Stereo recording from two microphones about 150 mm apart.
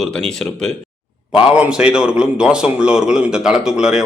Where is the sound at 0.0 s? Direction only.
5° left (ahead or behind).